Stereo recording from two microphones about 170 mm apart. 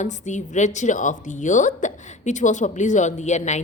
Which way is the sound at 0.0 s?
45° left (ahead or behind).